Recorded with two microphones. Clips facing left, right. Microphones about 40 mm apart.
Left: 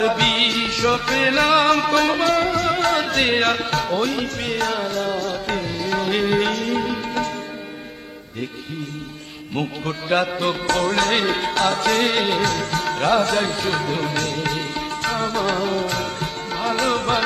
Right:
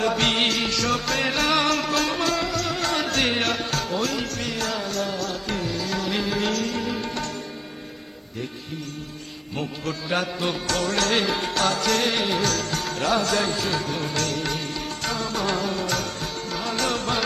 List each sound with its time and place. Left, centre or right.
0.0 s music: left
0.9 s music: left
1.8 s music: left
9.6 s music: left
15.4 s music: left